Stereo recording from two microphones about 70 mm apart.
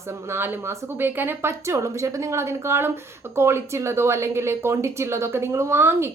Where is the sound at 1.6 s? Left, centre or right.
Right.